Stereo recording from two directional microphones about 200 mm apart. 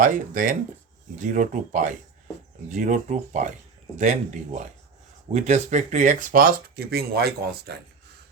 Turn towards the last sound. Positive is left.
turn(degrees=-55)  # may be behind; listen again after turning